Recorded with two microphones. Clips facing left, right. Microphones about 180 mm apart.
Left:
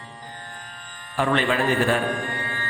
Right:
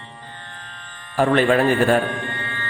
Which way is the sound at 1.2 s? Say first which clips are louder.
Right 6 dB; 45° right (ahead or behind).